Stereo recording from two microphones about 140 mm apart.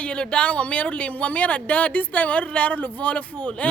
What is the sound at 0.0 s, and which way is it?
Speech, 5° left (ahead or behind).